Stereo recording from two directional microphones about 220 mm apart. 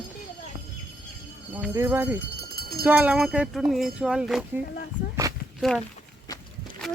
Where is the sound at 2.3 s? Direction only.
45° right (ahead or behind).